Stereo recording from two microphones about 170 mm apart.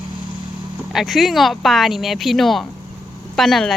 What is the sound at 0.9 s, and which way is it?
Speech, centre (ahead or behind).